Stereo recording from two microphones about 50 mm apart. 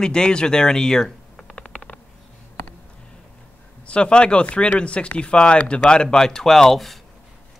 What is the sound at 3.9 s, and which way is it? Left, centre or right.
Speech, left.